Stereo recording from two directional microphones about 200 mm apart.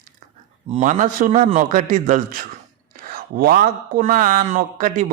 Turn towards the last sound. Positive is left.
turn(degrees=-40)  # may be behind; listen again after turning